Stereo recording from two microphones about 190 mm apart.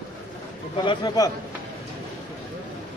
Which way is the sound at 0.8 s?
25° left (ahead or behind).